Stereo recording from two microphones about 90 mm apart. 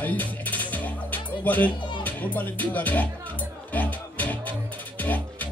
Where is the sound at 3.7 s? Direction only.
20° left (ahead or behind).